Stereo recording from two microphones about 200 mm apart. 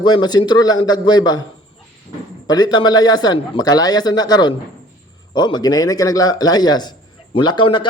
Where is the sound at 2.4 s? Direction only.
20° left (ahead or behind).